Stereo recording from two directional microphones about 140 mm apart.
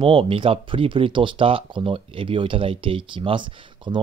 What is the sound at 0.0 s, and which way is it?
Speech, 40° right (ahead or behind).